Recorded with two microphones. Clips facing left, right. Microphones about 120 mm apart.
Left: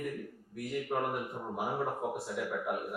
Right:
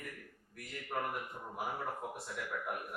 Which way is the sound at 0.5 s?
5° left (ahead or behind).